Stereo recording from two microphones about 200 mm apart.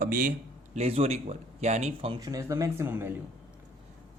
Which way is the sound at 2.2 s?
15° right (ahead or behind).